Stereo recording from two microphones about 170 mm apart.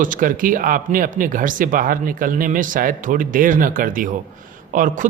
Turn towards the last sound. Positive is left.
turn(degrees=-50)  # may be behind; listen again after turning